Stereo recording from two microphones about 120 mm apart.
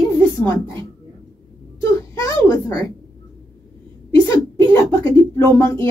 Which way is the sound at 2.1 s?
20° left (ahead or behind).